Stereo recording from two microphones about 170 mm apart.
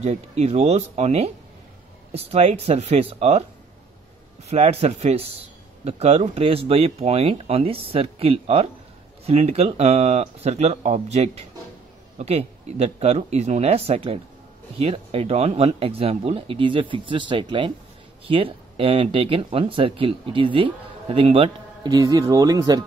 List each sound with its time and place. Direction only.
0.0 s speech: 40° right (ahead or behind)
4.5 s speech: 40° right (ahead or behind); by 22.8 s 20° right (ahead or behind)